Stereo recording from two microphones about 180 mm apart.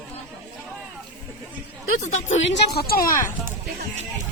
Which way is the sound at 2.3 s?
70° left (ahead or behind).